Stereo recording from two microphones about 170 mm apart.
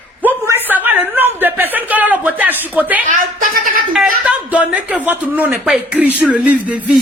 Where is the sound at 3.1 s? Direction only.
55° right (ahead or behind).